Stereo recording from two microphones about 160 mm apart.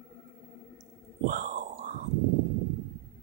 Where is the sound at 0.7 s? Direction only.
55° right (ahead or behind).